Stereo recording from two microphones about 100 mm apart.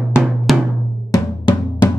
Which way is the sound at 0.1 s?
5° right (ahead or behind).